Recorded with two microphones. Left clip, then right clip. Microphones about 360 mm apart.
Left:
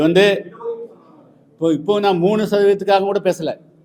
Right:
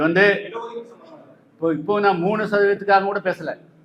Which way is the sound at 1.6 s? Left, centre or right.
Left.